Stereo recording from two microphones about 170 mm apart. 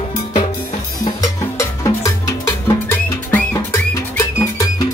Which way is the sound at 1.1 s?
20° left (ahead or behind).